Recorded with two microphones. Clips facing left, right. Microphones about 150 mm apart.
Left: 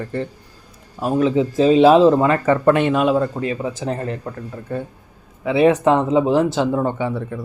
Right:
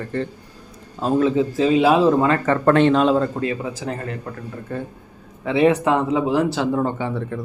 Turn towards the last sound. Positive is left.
turn(degrees=15)  # may be behind; listen again after turning